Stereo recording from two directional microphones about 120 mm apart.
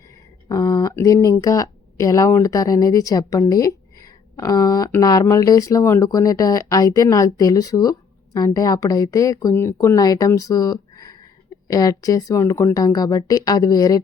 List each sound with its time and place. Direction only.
0.4 s speech: 30° left (ahead or behind)